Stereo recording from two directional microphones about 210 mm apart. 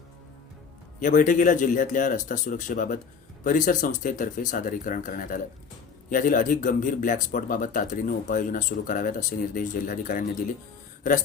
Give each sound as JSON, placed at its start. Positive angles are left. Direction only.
{"t": 0.9, "sound": "speech", "side_deg": 40}